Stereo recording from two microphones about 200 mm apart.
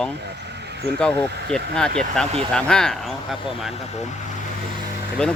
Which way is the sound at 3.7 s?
35° left (ahead or behind).